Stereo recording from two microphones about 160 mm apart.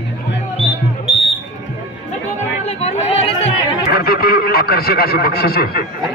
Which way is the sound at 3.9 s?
70° left (ahead or behind).